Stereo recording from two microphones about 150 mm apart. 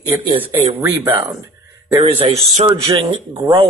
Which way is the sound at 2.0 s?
40° right (ahead or behind).